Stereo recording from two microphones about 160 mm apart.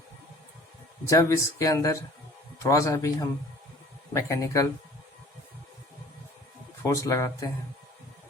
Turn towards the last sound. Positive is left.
turn(degrees=20)  # may be behind; listen again after turning